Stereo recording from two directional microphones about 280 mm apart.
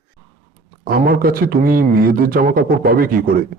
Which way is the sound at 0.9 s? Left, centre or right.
Right.